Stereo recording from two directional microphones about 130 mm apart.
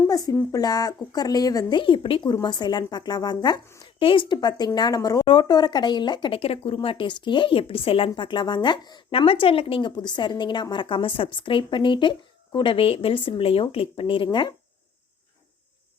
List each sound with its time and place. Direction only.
0.1 s speech: 30° left (ahead or behind)